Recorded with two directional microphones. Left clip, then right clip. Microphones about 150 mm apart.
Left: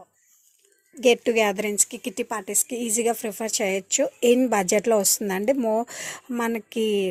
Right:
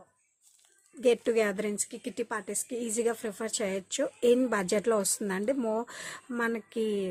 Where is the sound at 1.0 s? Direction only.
20° left (ahead or behind).